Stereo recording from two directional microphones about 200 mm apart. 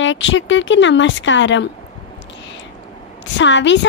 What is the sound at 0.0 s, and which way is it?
Speech, 70° left (ahead or behind).